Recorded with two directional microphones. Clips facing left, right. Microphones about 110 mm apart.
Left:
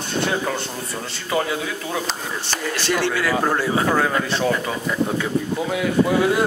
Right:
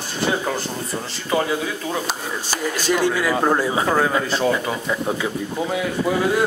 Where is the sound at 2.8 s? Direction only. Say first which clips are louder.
Right 2 dB; 15° right (ahead or behind).